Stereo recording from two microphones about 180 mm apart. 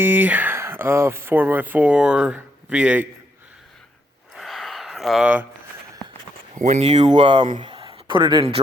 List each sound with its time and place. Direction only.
0.0 s speech: 10° right (ahead or behind)
4.4 s a sound: centre (ahead or behind)
6.6 s speech: 40° right (ahead or behind)
7.0 s speech: 25° right (ahead or behind)